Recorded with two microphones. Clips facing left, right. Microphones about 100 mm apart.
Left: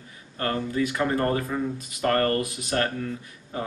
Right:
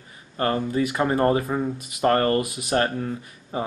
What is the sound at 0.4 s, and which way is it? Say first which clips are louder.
Speech: right 3 dB; 30° right (ahead or behind).